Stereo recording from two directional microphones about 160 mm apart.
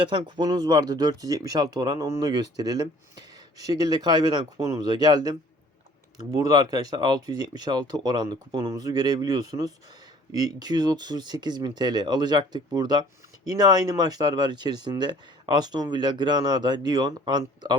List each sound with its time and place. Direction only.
0.0 s speech: 30° right (ahead or behind)